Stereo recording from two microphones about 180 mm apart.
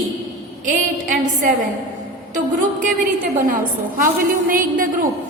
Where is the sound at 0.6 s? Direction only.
45° right (ahead or behind).